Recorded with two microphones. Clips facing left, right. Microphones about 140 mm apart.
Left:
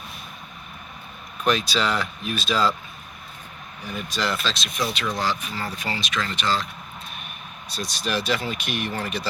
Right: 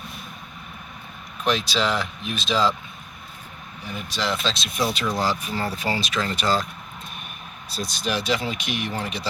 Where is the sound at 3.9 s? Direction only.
10° right (ahead or behind).